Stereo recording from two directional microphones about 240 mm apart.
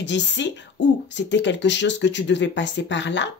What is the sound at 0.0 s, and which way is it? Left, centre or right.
Speech, left.